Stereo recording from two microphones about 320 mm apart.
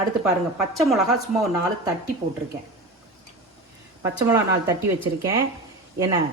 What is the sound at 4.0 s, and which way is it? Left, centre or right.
Speech, centre.